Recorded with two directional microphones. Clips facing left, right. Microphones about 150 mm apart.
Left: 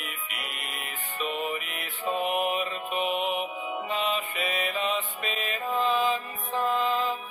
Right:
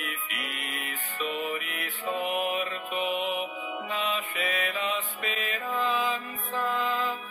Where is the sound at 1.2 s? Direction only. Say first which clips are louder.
Even; 20° left (ahead or behind).